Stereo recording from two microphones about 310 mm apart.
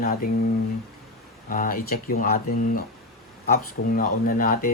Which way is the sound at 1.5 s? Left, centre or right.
Left.